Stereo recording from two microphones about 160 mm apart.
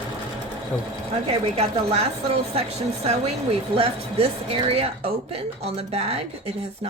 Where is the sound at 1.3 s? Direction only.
40° right (ahead or behind).